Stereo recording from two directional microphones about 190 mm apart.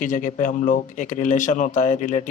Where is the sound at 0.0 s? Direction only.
45° left (ahead or behind).